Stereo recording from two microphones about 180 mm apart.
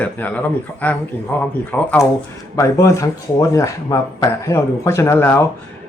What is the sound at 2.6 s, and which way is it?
Speech, 15° left (ahead or behind).